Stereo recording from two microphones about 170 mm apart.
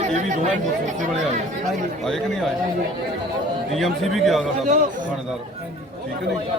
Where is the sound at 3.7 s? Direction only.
Centre (ahead or behind).